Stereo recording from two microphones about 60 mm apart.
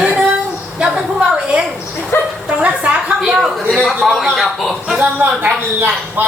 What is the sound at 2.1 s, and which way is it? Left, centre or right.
Bow-wow, left.